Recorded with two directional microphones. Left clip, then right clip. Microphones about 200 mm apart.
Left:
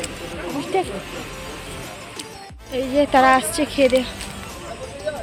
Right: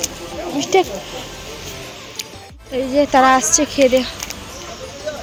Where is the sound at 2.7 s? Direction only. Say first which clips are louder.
Right 3 dB; 15° right (ahead or behind).